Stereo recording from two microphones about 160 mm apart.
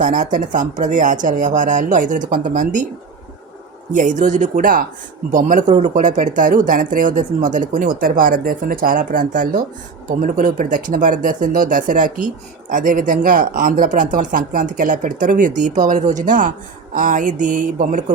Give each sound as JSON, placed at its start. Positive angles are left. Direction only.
{"t": 0.0, "sound": "speech", "side_deg": -50}
{"t": 3.9, "sound": "speech", "side_deg": -50}